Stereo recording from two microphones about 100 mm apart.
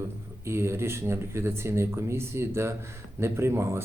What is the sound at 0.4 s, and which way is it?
Speech, 25° right (ahead or behind).